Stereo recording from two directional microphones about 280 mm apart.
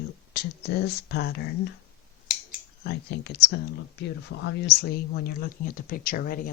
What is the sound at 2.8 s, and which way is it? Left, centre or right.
Speech, left.